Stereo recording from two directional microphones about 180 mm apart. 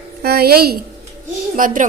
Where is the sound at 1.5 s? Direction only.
50° right (ahead or behind).